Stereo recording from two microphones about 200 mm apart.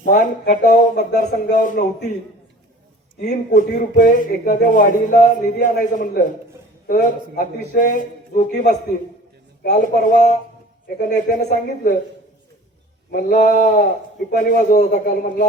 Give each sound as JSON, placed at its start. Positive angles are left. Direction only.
{"t": 0.0, "sound": "speech", "side_deg": 40}
{"t": 3.2, "sound": "speech", "side_deg": 40}
{"t": 13.1, "sound": "speech", "side_deg": 50}